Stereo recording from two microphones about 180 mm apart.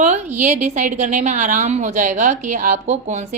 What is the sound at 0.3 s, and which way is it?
A woman's voice, 45° right (ahead or behind).